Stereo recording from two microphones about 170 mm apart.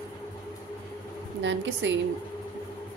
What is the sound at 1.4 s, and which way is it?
Speech, 90° right.